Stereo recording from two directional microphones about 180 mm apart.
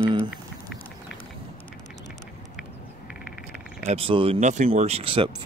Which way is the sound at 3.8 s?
30° right (ahead or behind).